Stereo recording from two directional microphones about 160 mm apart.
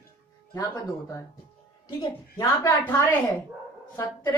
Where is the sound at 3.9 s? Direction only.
15° left (ahead or behind).